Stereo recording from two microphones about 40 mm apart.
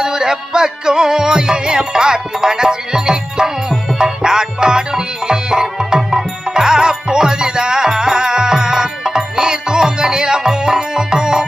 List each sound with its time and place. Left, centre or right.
0.0 s music: centre